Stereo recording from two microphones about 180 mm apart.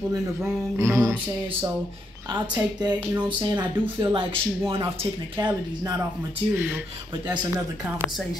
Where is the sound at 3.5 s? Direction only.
25° right (ahead or behind).